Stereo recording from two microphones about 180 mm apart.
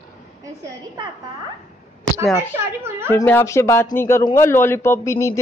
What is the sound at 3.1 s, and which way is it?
A man's voice, 10° left (ahead or behind).